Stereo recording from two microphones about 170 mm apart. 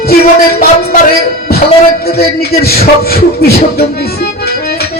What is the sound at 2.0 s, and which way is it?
Music, 65° left (ahead or behind).